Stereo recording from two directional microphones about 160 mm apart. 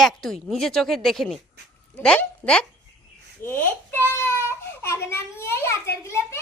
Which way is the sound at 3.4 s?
15° left (ahead or behind).